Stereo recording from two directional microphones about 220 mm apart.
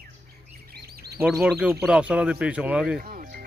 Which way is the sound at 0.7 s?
45° right (ahead or behind).